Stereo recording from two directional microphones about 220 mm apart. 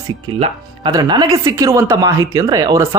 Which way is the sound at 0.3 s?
25° right (ahead or behind).